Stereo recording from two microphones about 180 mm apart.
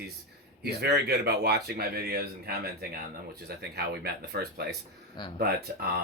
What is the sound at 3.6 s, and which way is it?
Speech, 65° right (ahead or behind).